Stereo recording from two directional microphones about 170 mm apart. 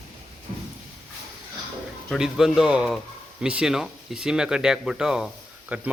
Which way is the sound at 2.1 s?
Centre (ahead or behind).